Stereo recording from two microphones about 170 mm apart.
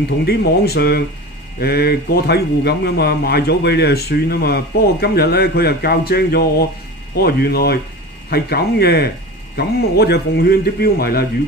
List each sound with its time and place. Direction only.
0.2 s a man's voice: 75° left (ahead or behind)